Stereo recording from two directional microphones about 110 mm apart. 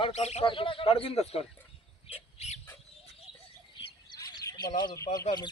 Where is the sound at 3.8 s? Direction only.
35° left (ahead or behind).